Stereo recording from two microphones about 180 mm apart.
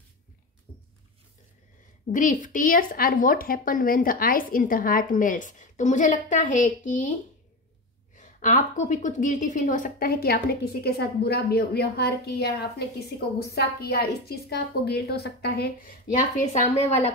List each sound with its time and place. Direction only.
2.1 s speech: 45° left (ahead or behind)
8.2 s a woman's voice: 45° left (ahead or behind)